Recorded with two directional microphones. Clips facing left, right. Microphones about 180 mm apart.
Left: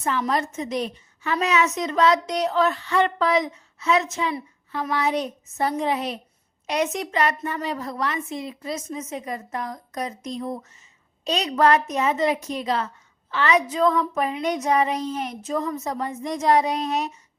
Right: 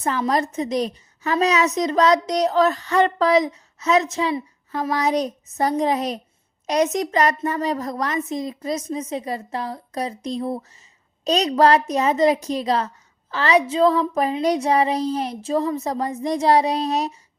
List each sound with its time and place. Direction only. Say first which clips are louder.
0.0 s a woman's voice: right 3 dB; 40° right (ahead or behind)